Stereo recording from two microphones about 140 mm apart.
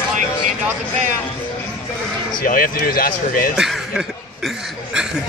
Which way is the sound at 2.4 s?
90° left.